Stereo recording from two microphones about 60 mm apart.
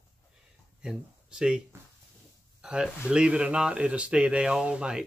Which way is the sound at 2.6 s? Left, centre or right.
Centre.